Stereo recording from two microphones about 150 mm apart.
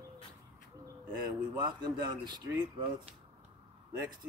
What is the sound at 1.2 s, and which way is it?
A man's voice, 30° right (ahead or behind).